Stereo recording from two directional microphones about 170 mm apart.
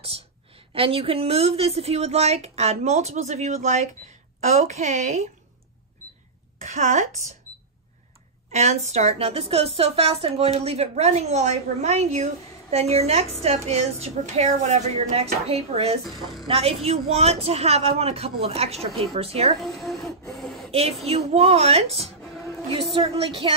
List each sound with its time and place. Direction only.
0.7 s a woman's voice: 35° right (ahead or behind)
6.6 s a woman's voice: 45° right (ahead or behind)
8.5 s a woman's voice: 40° right (ahead or behind)
19.6 s a sound: centre (ahead or behind)
21.3 s a woman's voice: 35° right (ahead or behind)